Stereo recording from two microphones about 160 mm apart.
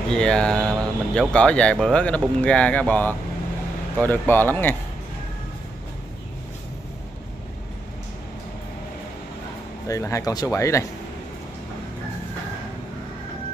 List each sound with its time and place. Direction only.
0.1 s speech: 5° left (ahead or behind)
9.8 s speech: 20° left (ahead or behind)